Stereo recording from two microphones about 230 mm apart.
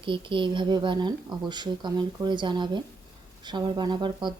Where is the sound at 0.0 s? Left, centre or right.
Right.